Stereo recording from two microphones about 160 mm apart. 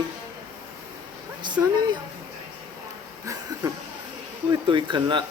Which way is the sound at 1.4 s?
25° right (ahead or behind).